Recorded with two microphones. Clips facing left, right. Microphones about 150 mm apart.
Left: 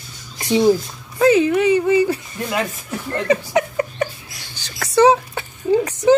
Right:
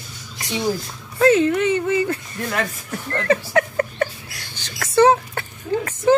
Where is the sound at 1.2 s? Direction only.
10° left (ahead or behind).